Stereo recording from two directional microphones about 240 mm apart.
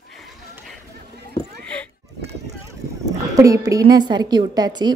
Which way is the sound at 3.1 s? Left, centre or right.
Centre.